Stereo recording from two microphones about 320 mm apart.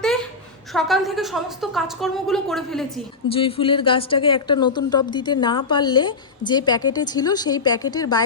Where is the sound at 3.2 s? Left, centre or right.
Centre.